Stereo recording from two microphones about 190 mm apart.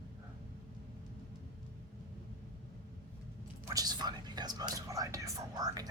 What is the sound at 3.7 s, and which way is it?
Whispering, 20° right (ahead or behind).